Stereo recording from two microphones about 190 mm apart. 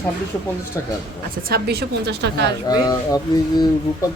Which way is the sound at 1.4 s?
50° right (ahead or behind).